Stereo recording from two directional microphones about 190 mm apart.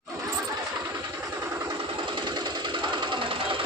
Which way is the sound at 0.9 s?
10° right (ahead or behind).